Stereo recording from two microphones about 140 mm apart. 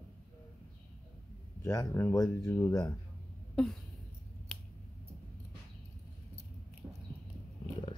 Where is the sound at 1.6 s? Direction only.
20° left (ahead or behind).